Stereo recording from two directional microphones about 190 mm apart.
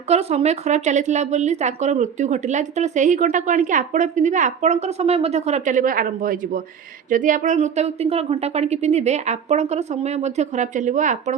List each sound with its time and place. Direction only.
0.1 s a woman's voice: 35° right (ahead or behind)